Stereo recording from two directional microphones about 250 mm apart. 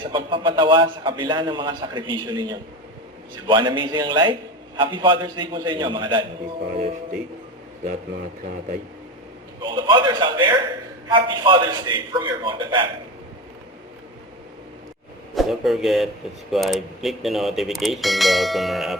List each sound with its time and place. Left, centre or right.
0.0 s a man's voice: centre
9.6 s a man's voice: centre
15.4 s speech: centre